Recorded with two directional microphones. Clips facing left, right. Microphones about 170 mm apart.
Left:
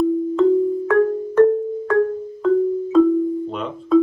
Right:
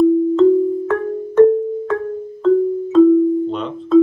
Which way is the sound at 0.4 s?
Centre (ahead or behind).